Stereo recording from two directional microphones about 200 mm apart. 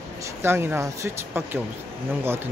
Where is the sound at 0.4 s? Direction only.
10° right (ahead or behind).